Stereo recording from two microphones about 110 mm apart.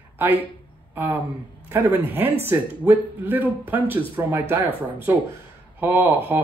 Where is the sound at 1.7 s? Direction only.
20° right (ahead or behind).